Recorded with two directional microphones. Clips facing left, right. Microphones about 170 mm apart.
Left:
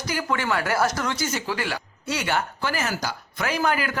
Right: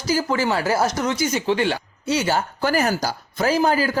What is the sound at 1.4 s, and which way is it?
Speech, 25° right (ahead or behind).